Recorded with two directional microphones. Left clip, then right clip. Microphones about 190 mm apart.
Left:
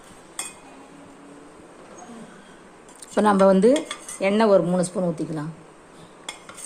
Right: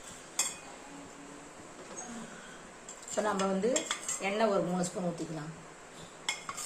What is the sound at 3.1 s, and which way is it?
Cutlery, 60° left (ahead or behind).